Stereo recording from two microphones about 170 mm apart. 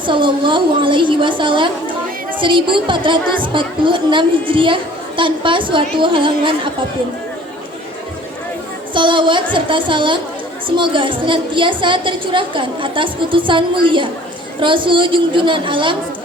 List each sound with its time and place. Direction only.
0.0 s a woman's voice: 30° right (ahead or behind)
9.0 s a woman's voice: 30° right (ahead or behind)